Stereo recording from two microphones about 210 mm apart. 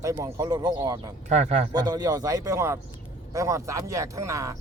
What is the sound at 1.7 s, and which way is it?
A man's voice, 20° right (ahead or behind).